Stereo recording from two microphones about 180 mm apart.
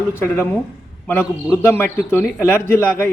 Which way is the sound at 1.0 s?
10° left (ahead or behind).